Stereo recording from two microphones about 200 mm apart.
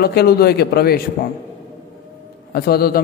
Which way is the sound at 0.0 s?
50° left (ahead or behind).